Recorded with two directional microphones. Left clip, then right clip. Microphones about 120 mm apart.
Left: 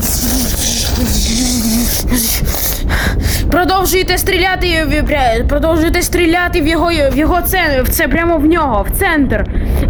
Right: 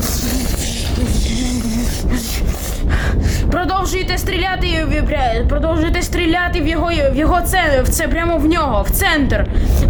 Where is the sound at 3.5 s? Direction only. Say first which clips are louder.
Left 6 dB; 45° left (ahead or behind); by 6.6 s 30° left (ahead or behind).